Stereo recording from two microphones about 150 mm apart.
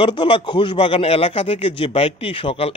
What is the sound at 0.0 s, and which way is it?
A man's voice, 35° left (ahead or behind).